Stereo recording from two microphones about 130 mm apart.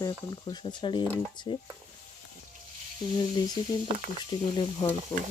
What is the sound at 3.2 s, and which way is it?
Speech, 35° left (ahead or behind).